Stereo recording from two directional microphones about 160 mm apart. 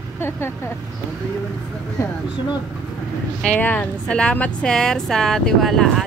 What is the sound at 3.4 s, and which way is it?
Speech, 5° left (ahead or behind).